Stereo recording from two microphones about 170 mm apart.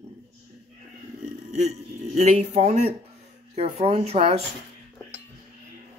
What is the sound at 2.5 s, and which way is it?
Speech, 55° right (ahead or behind).